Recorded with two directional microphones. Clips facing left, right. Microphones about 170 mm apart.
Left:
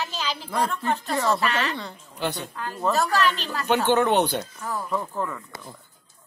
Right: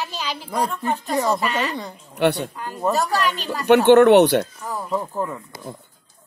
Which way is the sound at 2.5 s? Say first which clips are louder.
Right 2 dB; 15° right (ahead or behind).